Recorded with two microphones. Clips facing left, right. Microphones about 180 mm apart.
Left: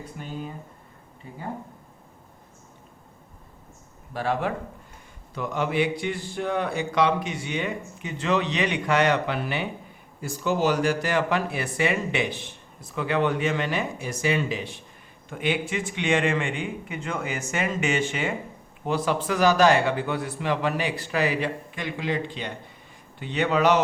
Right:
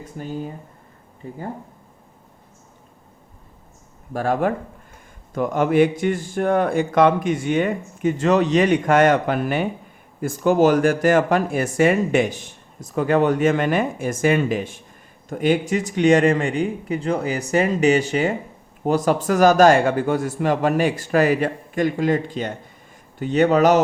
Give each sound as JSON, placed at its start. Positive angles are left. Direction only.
{"t": 4.1, "sound": "a man's voice", "side_deg": -45}